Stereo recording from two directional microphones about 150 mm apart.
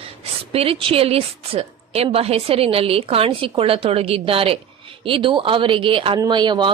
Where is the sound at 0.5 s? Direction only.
40° right (ahead or behind).